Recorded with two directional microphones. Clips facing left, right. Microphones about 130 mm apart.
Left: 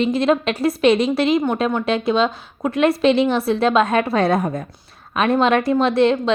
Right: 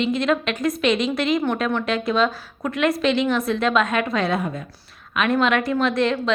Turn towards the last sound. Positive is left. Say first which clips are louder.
# left 5 dB
turn(degrees=30)  # may be behind; listen again after turning